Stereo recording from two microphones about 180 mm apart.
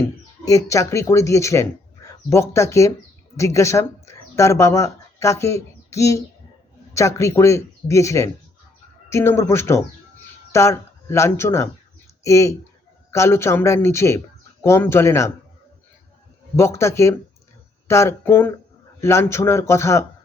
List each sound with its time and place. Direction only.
0.0 s speech: 15° left (ahead or behind)
16.6 s speech: 15° left (ahead or behind)